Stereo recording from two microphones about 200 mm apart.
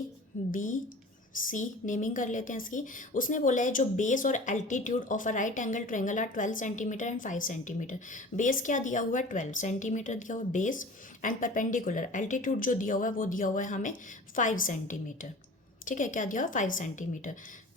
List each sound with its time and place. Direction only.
0.5 s a woman's voice: 40° left (ahead or behind)